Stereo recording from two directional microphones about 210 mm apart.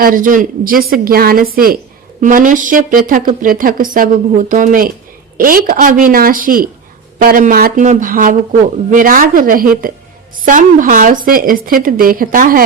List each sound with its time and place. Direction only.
0.0 s a woman's voice: 40° right (ahead or behind)